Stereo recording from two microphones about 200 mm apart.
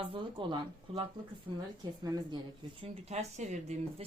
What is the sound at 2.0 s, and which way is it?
Speech, 20° right (ahead or behind).